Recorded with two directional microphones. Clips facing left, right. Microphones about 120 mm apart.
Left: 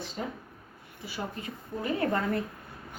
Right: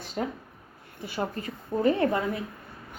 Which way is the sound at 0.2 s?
55° right (ahead or behind).